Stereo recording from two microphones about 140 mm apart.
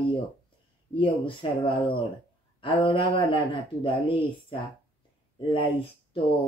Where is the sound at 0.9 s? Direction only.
40° left (ahead or behind).